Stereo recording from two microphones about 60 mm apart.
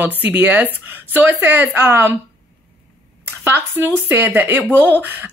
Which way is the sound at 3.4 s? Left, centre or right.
Right.